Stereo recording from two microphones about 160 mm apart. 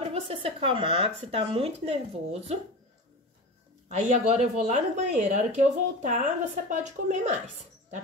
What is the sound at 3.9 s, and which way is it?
Speech, 45° right (ahead or behind).